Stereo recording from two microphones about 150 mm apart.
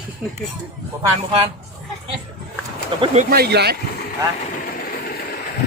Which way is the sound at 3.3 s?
90° right.